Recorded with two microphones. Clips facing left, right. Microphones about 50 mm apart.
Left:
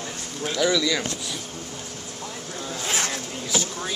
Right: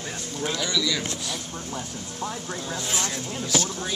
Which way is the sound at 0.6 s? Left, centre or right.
Centre.